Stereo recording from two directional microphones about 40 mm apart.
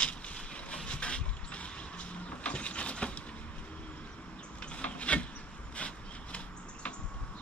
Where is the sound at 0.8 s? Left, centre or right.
Left.